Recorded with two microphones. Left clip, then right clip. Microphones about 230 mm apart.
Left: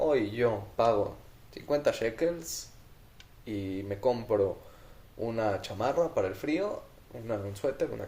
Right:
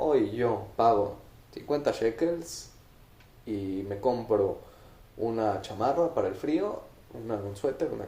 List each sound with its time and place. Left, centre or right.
0.1 s speech: left